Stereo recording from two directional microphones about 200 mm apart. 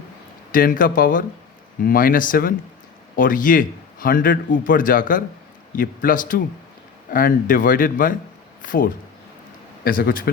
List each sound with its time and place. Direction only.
0.5 s a man's voice: 45° left (ahead or behind)